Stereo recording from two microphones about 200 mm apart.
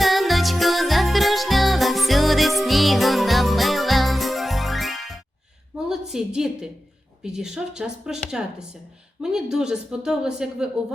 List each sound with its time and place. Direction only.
0.0 s music: centre (ahead or behind)
5.9 s a woman's voice: 5° right (ahead or behind)